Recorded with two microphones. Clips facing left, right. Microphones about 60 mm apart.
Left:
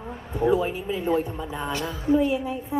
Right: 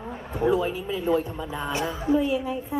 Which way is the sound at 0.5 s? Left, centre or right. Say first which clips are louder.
Left 1 dB; left.